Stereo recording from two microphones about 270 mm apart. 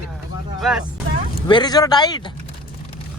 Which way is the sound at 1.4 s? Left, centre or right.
Centre.